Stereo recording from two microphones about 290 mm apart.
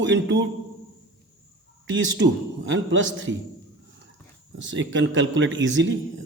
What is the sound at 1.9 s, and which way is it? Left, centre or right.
A man's voice, right.